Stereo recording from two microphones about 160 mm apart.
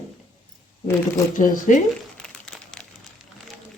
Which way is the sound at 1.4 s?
60° left (ahead or behind).